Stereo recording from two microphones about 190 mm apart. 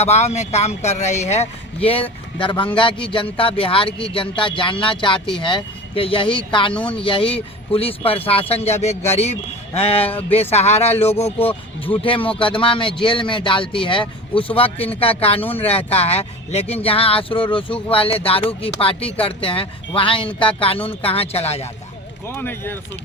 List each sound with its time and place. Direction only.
0.0 s speech: 35° left (ahead or behind)
22.4 s speech: 10° left (ahead or behind)